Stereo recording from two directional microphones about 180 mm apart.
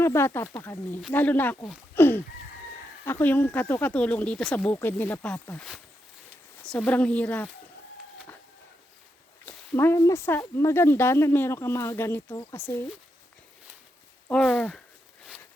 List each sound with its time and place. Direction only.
0.0 s speech: 15° left (ahead or behind)
2.0 s a sound: 10° left (ahead or behind)
3.1 s speech: 10° left (ahead or behind)
9.5 s speech: 15° left (ahead or behind)
12.3 s speech: 25° left (ahead or behind)
12.5 s speech: 10° left (ahead or behind)
14.3 s speech: 5° left (ahead or behind)